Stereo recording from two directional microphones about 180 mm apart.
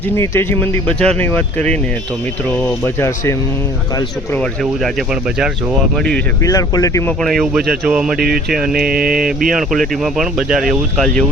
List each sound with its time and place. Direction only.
0.2 s speech: 15° left (ahead or behind)
4.6 s speech: centre (ahead or behind)
6.4 s speech: 20° left (ahead or behind)
7.2 s speech: centre (ahead or behind)
8.9 s mantra: 55° right (ahead or behind)
9.5 s speech: centre (ahead or behind)